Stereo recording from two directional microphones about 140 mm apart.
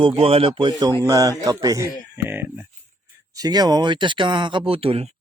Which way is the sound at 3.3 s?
30° right (ahead or behind).